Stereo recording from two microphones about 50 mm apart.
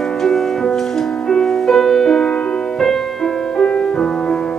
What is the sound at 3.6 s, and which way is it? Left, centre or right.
Music, centre.